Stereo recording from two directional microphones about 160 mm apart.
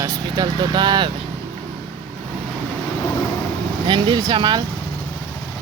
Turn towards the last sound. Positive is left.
turn(degrees=-30)  # may be behind; listen again after turning